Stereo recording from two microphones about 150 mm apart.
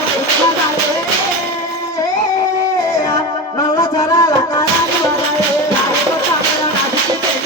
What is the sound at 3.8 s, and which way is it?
Music, 20° left (ahead or behind).